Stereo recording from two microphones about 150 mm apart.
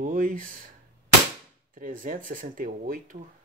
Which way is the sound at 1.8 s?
70° right (ahead or behind).